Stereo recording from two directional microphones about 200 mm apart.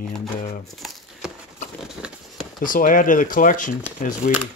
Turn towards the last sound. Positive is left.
turn(degrees=40)  # may be behind; listen again after turning